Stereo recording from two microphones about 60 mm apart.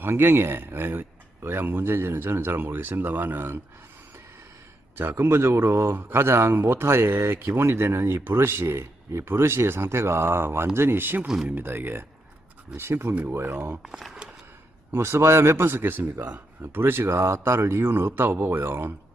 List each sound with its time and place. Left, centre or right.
0.0 s speech: right
4.9 s a man's voice: right
14.9 s a man's voice: right